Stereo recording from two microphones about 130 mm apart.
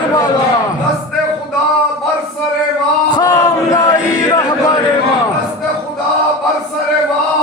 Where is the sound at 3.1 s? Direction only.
25° left (ahead or behind).